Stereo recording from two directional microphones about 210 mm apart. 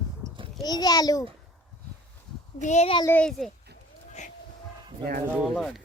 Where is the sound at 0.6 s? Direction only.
20° left (ahead or behind).